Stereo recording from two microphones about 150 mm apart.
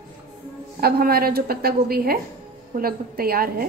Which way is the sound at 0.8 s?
90° right.